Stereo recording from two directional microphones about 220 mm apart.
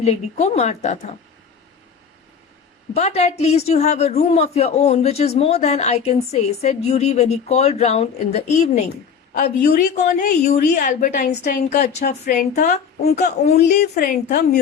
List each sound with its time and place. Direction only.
0.0 s a man's voice: 30° left (ahead or behind)
2.9 s a man's voice: 30° left (ahead or behind)
9.4 s a woman's voice: 40° left (ahead or behind)
12.0 s a woman's voice: 45° left (ahead or behind)
13.6 s speech: 50° left (ahead or behind)
13.9 s a woman's voice: 35° left (ahead or behind)